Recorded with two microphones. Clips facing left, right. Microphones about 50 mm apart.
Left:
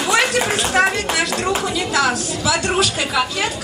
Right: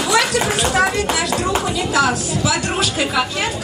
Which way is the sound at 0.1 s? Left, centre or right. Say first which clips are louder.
Even; left.